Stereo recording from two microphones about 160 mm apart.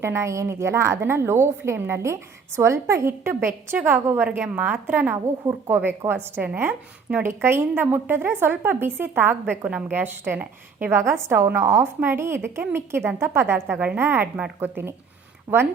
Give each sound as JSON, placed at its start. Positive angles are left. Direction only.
{"t": 0.0, "sound": "a woman's voice", "side_deg": -15}